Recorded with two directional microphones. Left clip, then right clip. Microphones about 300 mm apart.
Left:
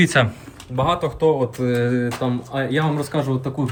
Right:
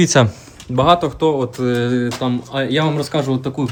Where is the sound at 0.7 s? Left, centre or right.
Right.